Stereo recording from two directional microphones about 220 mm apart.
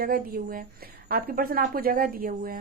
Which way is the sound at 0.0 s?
40° right (ahead or behind).